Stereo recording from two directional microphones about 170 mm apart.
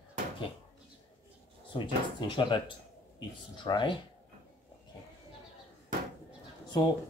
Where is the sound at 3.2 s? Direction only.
25° left (ahead or behind).